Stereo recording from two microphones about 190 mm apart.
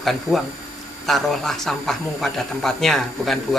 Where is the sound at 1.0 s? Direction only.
Centre (ahead or behind).